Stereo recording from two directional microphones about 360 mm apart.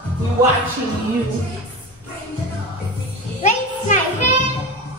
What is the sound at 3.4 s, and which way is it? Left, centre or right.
Music, centre.